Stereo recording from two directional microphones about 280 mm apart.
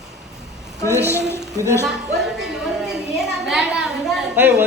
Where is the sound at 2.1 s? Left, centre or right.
Centre.